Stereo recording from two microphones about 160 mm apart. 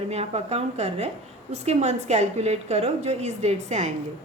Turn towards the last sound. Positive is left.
turn(degrees=-45)  # may be behind; listen again after turning